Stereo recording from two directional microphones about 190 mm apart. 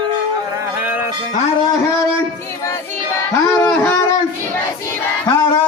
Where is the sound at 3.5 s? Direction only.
10° left (ahead or behind).